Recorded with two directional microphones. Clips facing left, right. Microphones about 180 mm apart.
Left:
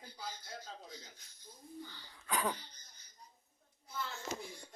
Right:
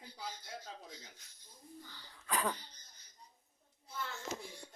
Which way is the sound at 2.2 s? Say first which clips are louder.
Even; 5° left (ahead or behind).